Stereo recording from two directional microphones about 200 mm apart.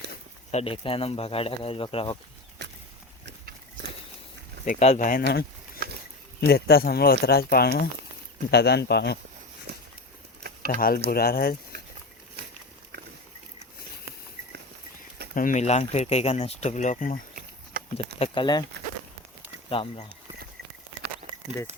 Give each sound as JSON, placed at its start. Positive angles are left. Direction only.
{"t": 0.5, "sound": "speech", "side_deg": 30}
{"t": 2.6, "sound": "a sound", "side_deg": -60}
{"t": 4.6, "sound": "speech", "side_deg": 35}
{"t": 5.8, "sound": "a sound", "side_deg": -50}
{"t": 6.4, "sound": "speech", "side_deg": 50}
{"t": 9.7, "sound": "a sound", "side_deg": -55}
{"t": 10.7, "sound": "speech", "side_deg": 45}
{"t": 15.4, "sound": "speech", "side_deg": 40}
{"t": 17.9, "sound": "speech", "side_deg": 25}
{"t": 19.7, "sound": "speech", "side_deg": 25}